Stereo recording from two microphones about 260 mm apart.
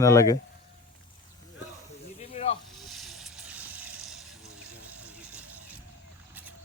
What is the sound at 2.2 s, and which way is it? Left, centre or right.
Snake, left.